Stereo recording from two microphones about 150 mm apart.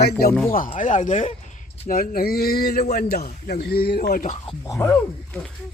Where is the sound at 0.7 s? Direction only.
60° left (ahead or behind).